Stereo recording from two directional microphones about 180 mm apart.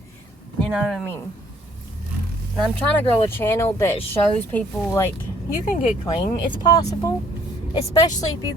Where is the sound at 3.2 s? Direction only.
15° left (ahead or behind).